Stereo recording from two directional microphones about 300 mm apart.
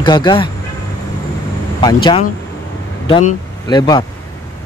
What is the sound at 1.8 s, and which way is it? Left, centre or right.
Speech, centre.